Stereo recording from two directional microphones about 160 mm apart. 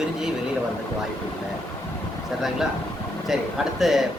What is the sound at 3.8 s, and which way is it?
Speech, centre (ahead or behind).